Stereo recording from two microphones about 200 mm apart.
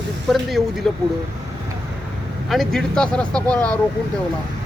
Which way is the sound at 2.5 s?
Centre (ahead or behind).